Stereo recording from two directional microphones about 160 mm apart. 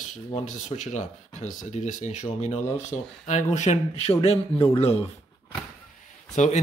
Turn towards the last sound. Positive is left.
turn(degrees=50)  # may be behind; listen again after turning